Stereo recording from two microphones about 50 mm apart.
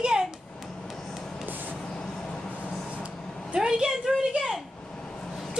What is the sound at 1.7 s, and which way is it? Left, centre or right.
Vehicle, left.